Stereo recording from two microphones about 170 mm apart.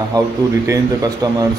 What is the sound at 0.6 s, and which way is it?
Speech, 20° right (ahead or behind).